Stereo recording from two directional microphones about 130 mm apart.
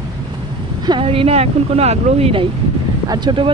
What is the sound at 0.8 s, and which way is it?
Speech, 40° right (ahead or behind).